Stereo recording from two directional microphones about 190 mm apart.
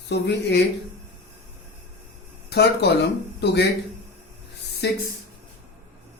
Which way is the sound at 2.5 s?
60° left (ahead or behind).